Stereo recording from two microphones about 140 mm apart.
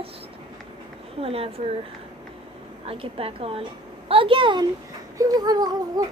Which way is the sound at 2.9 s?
45° right (ahead or behind).